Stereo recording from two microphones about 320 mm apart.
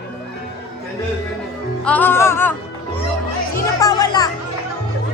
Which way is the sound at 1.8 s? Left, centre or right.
Centre.